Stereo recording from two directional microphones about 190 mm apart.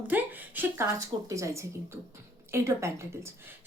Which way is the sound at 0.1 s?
10° right (ahead or behind).